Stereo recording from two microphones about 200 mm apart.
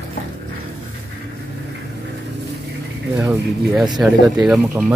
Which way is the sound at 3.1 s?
10° right (ahead or behind).